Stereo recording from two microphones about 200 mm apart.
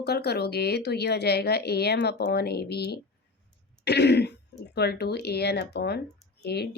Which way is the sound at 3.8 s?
55° left (ahead or behind).